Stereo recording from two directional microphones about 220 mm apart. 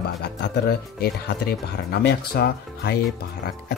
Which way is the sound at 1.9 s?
45° left (ahead or behind).